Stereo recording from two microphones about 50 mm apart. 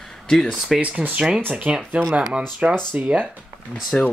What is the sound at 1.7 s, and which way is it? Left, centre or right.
Speech, right.